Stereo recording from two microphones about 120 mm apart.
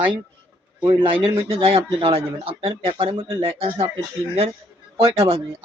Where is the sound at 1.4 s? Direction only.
55° right (ahead or behind).